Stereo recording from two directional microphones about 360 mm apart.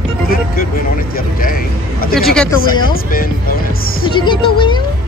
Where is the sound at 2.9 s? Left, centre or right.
Left.